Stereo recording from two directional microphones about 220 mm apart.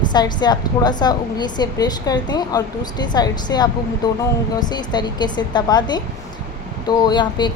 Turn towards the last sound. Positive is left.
turn(degrees=20)  # may be behind; listen again after turning